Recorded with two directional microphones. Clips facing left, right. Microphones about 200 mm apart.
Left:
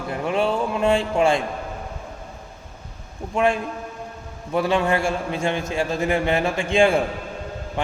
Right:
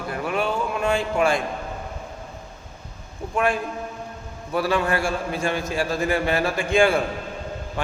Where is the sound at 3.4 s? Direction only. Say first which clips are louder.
Left 2 dB; 25° left (ahead or behind).